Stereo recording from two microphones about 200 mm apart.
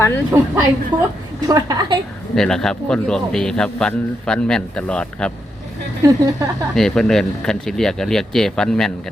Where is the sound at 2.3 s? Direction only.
Centre (ahead or behind).